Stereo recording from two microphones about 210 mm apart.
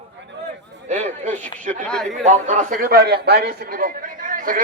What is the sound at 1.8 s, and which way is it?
Speech, 5° left (ahead or behind).